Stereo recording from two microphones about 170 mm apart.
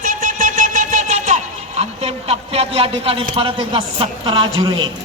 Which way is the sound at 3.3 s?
30° right (ahead or behind).